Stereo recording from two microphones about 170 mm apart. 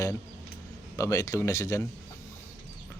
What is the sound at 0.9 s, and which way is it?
Speech, 20° left (ahead or behind).